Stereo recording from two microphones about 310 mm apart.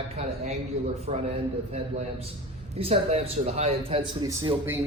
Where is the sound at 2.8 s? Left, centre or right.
Centre.